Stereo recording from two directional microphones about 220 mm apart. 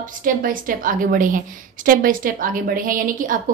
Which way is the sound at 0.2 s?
40° right (ahead or behind).